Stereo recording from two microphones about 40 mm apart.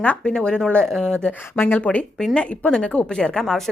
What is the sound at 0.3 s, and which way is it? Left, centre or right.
Speech, left.